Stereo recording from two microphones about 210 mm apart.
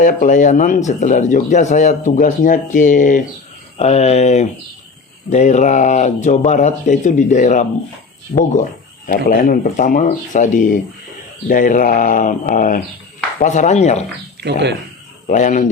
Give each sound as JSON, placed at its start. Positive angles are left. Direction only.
{"t": 0.0, "sound": "speech", "side_deg": 40}
{"t": 14.4, "sound": "speech", "side_deg": -55}
{"t": 15.3, "sound": "speech", "side_deg": 35}